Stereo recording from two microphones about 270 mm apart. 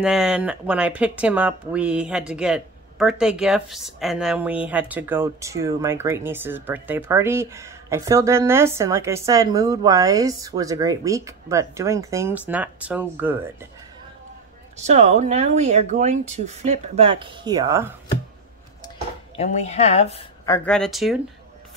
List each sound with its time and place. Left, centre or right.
0.0 s speech: centre
14.8 s speech: right
19.3 s speech: left
20.4 s speech: centre